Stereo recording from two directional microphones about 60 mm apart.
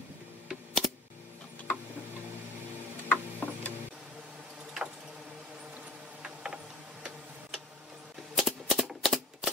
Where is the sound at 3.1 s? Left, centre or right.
Left.